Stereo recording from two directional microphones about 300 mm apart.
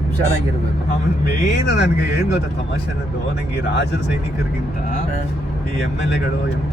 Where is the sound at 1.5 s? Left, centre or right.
Left.